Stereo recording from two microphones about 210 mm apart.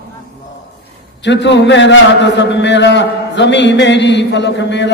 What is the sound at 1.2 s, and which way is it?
A man's voice, 55° left (ahead or behind).